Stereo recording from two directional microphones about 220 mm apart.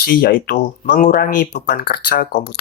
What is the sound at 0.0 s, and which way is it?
Speech, 45° left (ahead or behind).